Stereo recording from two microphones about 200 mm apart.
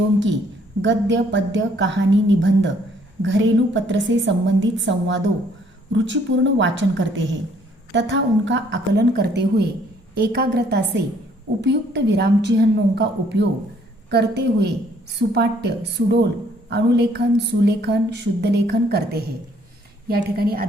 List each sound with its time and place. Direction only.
0.8 s a woman's voice: 65° right (ahead or behind); by 20.7 s 50° right (ahead or behind)